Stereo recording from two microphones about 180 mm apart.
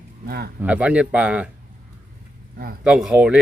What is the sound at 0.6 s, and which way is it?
Speech, 5° right (ahead or behind).